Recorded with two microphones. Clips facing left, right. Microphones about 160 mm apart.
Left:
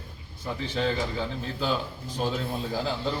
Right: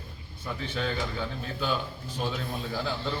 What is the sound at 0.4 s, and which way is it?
A man's voice, 30° left (ahead or behind).